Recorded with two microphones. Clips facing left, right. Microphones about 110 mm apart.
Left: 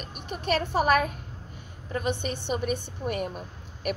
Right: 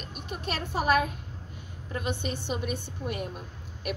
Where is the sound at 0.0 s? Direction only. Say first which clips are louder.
Left 2 dB; 55° left (ahead or behind).